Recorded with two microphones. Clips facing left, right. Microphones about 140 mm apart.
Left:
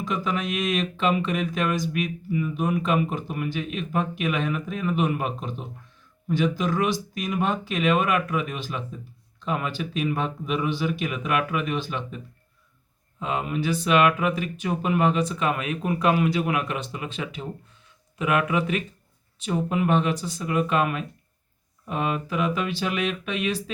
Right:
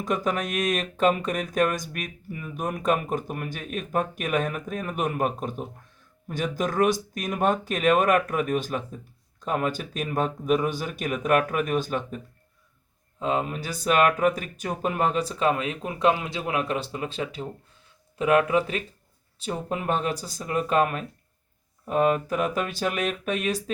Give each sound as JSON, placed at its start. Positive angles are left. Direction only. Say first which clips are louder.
{"t": 0.0, "sound": "speech", "louder": "right 1 dB", "side_deg": -45}